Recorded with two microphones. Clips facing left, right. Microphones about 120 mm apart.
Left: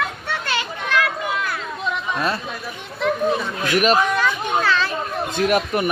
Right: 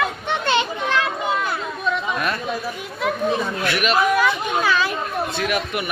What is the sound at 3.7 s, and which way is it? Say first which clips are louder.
Speech: left 5 dB; 40° left (ahead or behind).